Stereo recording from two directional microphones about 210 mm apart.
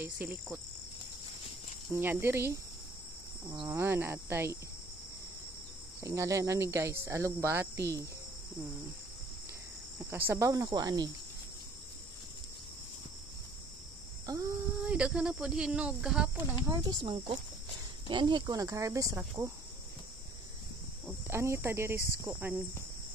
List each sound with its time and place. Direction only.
0.0 s speech: 10° right (ahead or behind)
1.9 s speech: 10° right (ahead or behind)
5.9 s speech: 15° right (ahead or behind)
9.9 s speech: 10° right (ahead or behind)
14.3 s a sound: 20° right (ahead or behind)
14.8 s speech: 5° right (ahead or behind)
16.6 s speech: 20° right (ahead or behind)
21.3 s speech: 10° right (ahead or behind)